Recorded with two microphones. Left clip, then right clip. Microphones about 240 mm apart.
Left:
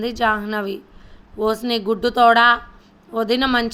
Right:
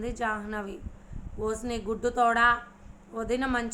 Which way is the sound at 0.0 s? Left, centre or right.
Left.